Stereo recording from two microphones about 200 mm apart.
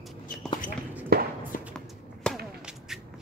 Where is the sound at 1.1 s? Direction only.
50° right (ahead or behind).